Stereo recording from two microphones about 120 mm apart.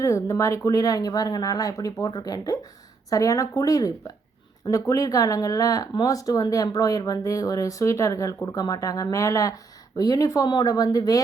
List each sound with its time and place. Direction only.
0.0 s speech: 25° left (ahead or behind)